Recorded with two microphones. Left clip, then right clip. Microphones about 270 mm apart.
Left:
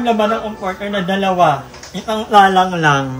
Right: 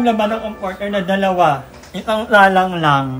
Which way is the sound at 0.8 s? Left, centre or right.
Centre.